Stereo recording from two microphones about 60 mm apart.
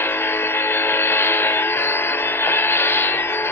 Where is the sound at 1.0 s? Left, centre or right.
Left.